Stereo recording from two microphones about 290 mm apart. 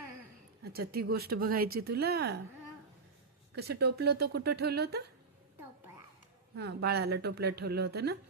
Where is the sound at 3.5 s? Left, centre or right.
Right.